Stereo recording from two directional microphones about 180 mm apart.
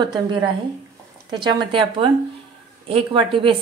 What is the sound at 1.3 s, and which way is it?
A woman's voice, 25° right (ahead or behind).